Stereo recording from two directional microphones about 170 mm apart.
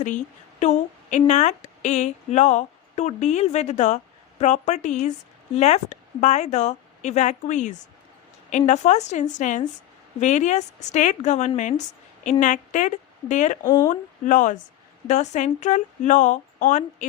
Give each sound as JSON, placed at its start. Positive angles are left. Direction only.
{"t": 0.6, "sound": "a woman's voice", "side_deg": 45}
{"t": 13.7, "sound": "speech", "side_deg": 25}
{"t": 13.9, "sound": "speech", "side_deg": 50}